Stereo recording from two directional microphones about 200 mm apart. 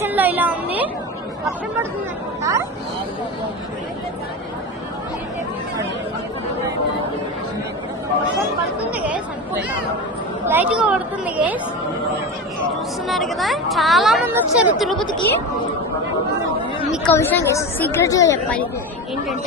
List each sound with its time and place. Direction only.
0.0 s a sound: 10° right (ahead or behind)
2.4 s a sound: 15° right (ahead or behind)
8.9 s chatter: 5° right (ahead or behind)
10.4 s a woman's voice: 10° right (ahead or behind)
13.1 s speech: centre (ahead or behind)
16.9 s chatter: 5° left (ahead or behind)
17.2 s a woman's voice: 10° left (ahead or behind)